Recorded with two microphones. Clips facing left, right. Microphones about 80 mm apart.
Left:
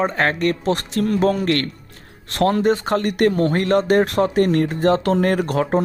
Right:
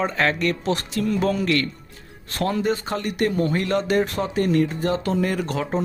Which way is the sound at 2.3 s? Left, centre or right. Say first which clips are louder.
Left 6 dB; left.